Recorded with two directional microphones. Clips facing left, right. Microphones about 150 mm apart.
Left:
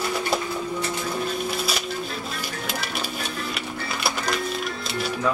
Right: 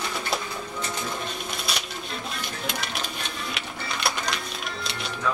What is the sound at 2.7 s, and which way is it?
Music, 5° left (ahead or behind).